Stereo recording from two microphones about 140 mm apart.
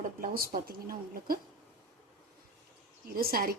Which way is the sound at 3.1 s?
90° right.